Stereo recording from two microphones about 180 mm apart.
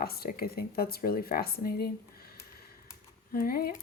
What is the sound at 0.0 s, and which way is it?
Speech, 60° left (ahead or behind).